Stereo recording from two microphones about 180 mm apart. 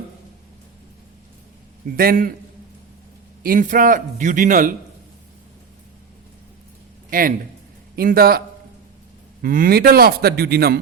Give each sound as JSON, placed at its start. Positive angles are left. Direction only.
{"t": 2.0, "sound": "speech", "side_deg": -55}
{"t": 3.4, "sound": "speech", "side_deg": -50}
{"t": 7.1, "sound": "a man's voice", "side_deg": -50}
{"t": 9.4, "sound": "a man's voice", "side_deg": -55}